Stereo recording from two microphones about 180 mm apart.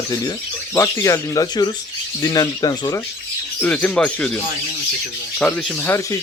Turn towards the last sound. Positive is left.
turn(degrees=15)  # may be behind; listen again after turning